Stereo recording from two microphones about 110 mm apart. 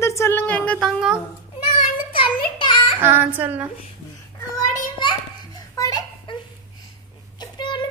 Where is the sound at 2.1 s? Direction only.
50° left (ahead or behind).